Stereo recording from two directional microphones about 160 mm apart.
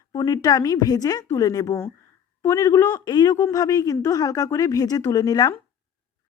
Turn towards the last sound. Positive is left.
turn(degrees=25)  # may be behind; listen again after turning